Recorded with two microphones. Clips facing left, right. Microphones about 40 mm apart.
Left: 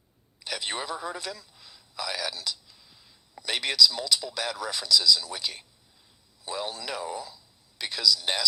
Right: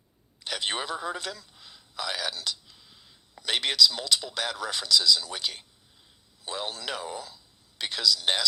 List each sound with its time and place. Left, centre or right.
0.4 s speech: right
1.5 s a sound: right
3.4 s speech: right